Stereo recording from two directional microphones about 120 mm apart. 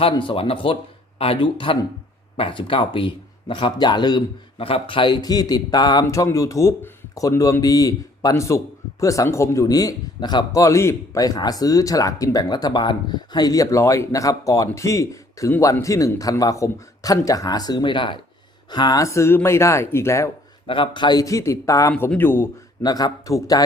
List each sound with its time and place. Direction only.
0.1 s speech: 45° left (ahead or behind); by 20.3 s 25° left (ahead or behind)
20.7 s speech: 45° left (ahead or behind); by 22.4 s 20° left (ahead or behind)
22.8 s speech: 35° left (ahead or behind)